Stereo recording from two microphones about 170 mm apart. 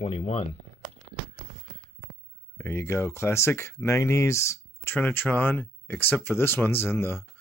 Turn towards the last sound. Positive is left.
turn(degrees=15)  # may be behind; listen again after turning